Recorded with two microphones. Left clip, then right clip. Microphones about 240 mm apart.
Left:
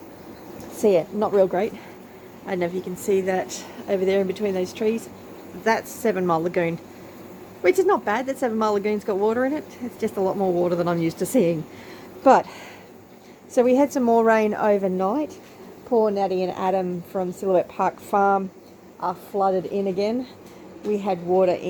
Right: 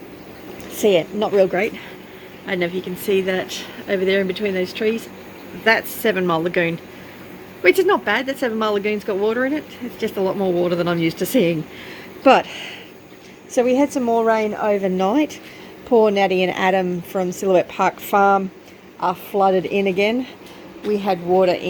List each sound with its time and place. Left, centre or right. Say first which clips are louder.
0.8 s a woman's voice: right 3 dB; centre
14.8 s a woman's voice: right 4 dB; centre
18.9 s a woman's voice: right 5 dB; centre